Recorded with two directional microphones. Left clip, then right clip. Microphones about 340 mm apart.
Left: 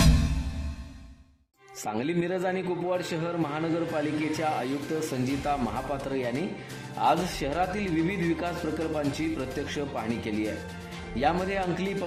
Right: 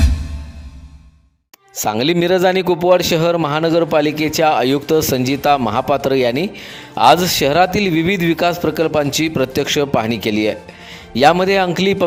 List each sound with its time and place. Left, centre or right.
1.7 s a man's voice: right